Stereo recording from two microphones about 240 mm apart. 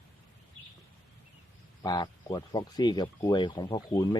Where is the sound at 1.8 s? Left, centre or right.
Centre.